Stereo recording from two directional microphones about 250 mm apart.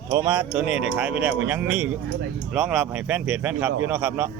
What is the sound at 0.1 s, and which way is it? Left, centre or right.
Speech, centre.